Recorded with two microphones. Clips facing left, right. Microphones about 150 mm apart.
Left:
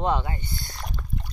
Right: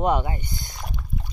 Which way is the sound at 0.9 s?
5° right (ahead or behind).